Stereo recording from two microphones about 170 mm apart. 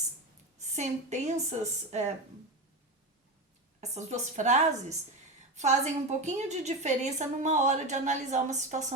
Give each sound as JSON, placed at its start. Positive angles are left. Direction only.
{"t": 0.8, "sound": "a woman's voice", "side_deg": -45}
{"t": 3.8, "sound": "a woman's voice", "side_deg": -45}